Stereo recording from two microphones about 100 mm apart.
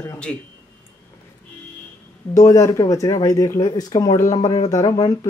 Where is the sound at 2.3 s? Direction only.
35° left (ahead or behind).